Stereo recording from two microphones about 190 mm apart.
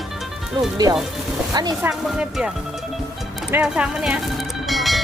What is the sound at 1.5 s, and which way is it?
Speech, 20° right (ahead or behind).